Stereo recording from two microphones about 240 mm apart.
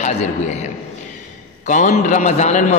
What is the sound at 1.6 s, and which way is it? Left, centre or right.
A man's voice, left.